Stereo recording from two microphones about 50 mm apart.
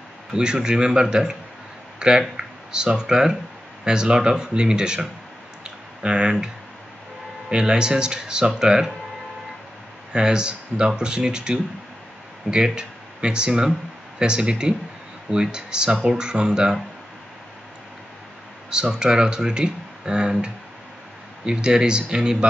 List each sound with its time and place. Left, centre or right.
0.3 s speech: centre
5.6 s clicking: centre
7.4 s speech: centre
10.1 s speech: centre
18.7 s speech: centre